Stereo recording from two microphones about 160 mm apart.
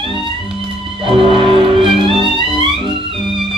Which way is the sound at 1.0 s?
35° right (ahead or behind).